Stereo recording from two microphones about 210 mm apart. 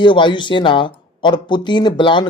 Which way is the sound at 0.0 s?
20° left (ahead or behind).